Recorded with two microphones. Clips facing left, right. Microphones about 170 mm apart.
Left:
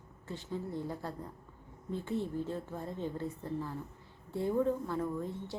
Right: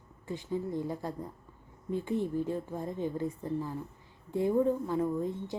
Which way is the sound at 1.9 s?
15° right (ahead or behind).